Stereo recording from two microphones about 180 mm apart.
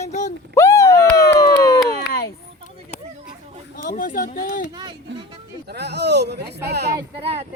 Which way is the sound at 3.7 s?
50° left (ahead or behind).